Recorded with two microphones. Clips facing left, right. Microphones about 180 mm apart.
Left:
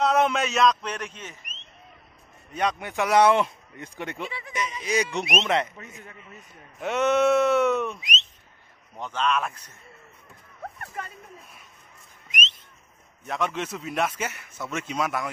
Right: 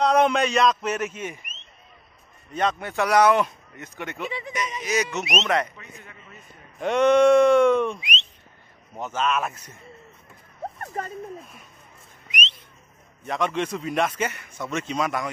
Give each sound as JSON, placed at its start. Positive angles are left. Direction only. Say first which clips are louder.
{"t": 0.0, "sound": "a man's voice", "louder": "right 3 dB", "side_deg": 0}
{"t": 2.5, "sound": "speech", "louder": "right 2 dB", "side_deg": 10}
{"t": 5.8, "sound": "a man's voice", "louder": "left 2 dB", "side_deg": 45}
{"t": 6.8, "sound": "a man's voice", "louder": "right 5 dB", "side_deg": 5}
{"t": 8.0, "sound": "a sound", "louder": "right 1 dB", "side_deg": 40}
{"t": 9.0, "sound": "a man's voice", "louder": "right 1 dB", "side_deg": -5}
{"t": 10.6, "sound": "a sound", "louder": "right 5 dB", "side_deg": -35}
{"t": 12.3, "sound": "whistling", "louder": "right 1 dB", "side_deg": 45}
{"t": 13.3, "sound": "a man's voice", "louder": "right 3 dB", "side_deg": 5}